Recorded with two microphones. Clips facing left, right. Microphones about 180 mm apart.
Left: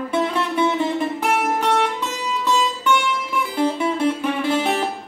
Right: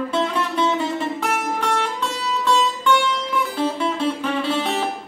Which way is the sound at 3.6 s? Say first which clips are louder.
Left 4 dB; 10° left (ahead or behind).